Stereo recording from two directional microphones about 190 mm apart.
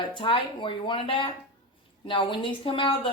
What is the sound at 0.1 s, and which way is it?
Speech, 25° left (ahead or behind).